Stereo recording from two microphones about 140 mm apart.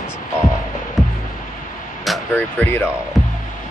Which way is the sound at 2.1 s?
Centre (ahead or behind).